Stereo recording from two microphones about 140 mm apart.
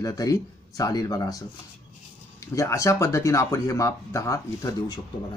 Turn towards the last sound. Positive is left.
turn(degrees=25)  # may be behind; listen again after turning